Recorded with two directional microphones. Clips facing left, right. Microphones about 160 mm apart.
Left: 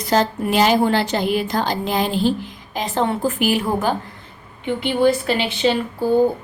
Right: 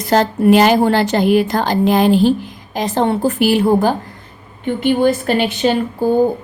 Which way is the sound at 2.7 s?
40° right (ahead or behind).